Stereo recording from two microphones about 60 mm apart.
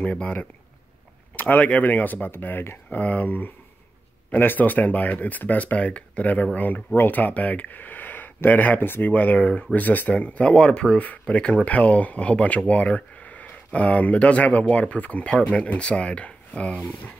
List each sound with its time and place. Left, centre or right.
0.0 s speech: left
2.9 s speech: left